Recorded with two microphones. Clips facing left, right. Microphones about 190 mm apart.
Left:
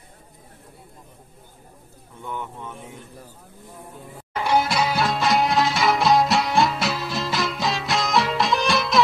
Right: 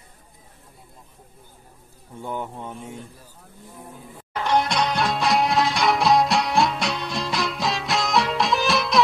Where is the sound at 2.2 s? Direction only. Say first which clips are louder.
Right 2 dB; 35° right (ahead or behind).